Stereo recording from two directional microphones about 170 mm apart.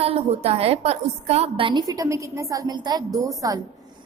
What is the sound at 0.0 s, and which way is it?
A woman's voice, 35° right (ahead or behind).